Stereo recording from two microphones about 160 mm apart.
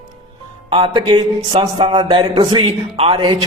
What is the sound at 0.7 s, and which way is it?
A man's voice, 35° right (ahead or behind).